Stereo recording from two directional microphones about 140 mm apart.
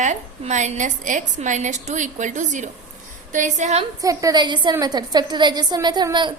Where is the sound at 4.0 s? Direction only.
25° right (ahead or behind).